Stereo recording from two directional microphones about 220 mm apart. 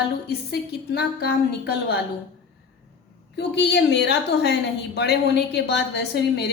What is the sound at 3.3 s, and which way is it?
A woman's voice, 50° left (ahead or behind).